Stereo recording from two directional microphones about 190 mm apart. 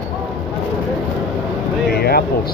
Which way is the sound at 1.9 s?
55° left (ahead or behind).